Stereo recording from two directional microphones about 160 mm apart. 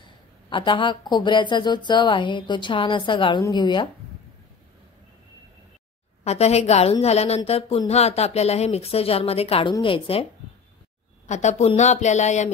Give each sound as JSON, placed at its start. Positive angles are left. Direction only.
{"t": 0.5, "sound": "speech", "side_deg": 30}
{"t": 6.2, "sound": "a woman's voice", "side_deg": 40}
{"t": 11.2, "sound": "speech", "side_deg": 45}